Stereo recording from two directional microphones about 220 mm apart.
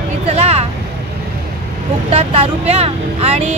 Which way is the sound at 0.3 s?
30° right (ahead or behind).